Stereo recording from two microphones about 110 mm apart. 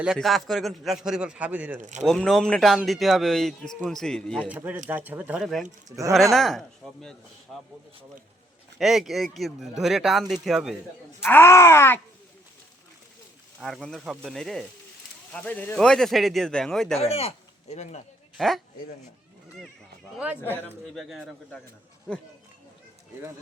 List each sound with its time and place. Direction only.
0.0 s a man's voice: centre (ahead or behind)
2.0 s a man's voice: 5° left (ahead or behind)
4.4 s a man's voice: 15° right (ahead or behind)
5.4 s a man's voice: centre (ahead or behind)
8.8 s a man's voice: centre (ahead or behind)
11.3 s speech: 20° left (ahead or behind)
13.6 s a man's voice: centre (ahead or behind)
17.0 s speech: 65° left (ahead or behind); by 18.0 s 90° left
18.3 s a man's voice: centre (ahead or behind)
20.1 s a man's voice: 15° right (ahead or behind)
20.9 s a man's voice: centre (ahead or behind)